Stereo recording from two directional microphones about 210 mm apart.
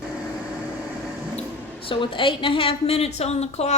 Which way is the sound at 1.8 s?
25° left (ahead or behind).